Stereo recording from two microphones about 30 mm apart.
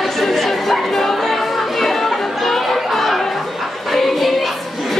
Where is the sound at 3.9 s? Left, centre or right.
Centre.